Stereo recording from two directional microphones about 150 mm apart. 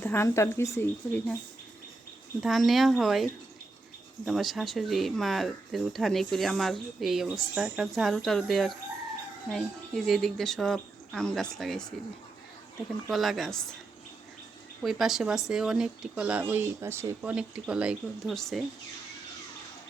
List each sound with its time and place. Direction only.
0.0 s a woman's voice: 15° left (ahead or behind)
2.4 s speech: centre (ahead or behind)
4.3 s speech: centre (ahead or behind)
13.1 s speech: centre (ahead or behind)
14.8 s speech: centre (ahead or behind)